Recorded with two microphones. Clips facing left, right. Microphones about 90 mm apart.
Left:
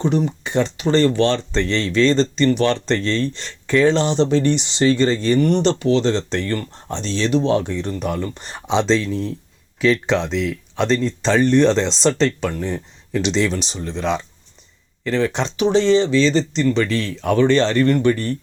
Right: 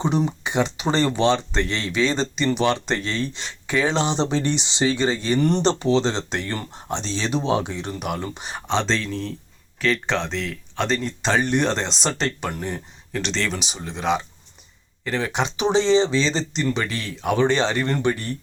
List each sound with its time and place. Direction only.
0.0 s speech: 20° right (ahead or behind)
8.5 s speech: 5° left (ahead or behind)
13.2 s speech: 5° left (ahead or behind)
13.5 s speech: 5° right (ahead or behind)
15.5 s speech: 20° right (ahead or behind)